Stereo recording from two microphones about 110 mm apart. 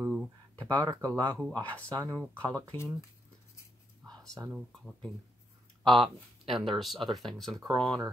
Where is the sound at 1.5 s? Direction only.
15° left (ahead or behind).